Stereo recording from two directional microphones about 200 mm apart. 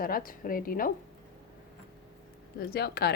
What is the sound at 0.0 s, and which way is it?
Speech, 45° left (ahead or behind).